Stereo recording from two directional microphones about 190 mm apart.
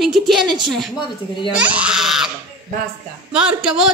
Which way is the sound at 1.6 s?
5° right (ahead or behind).